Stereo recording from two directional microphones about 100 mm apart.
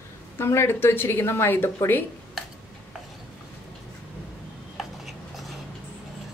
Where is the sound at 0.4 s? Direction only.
25° left (ahead or behind).